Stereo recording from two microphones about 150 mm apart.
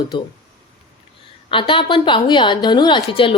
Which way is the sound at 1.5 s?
35° left (ahead or behind).